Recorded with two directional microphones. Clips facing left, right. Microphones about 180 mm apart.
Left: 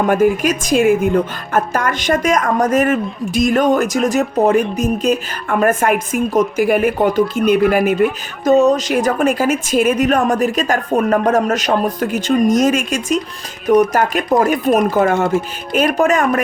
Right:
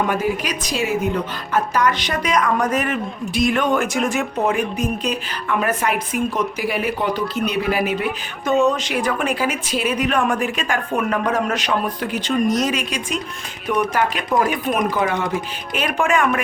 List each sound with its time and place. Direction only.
0.1 s a woman's voice: 50° left (ahead or behind)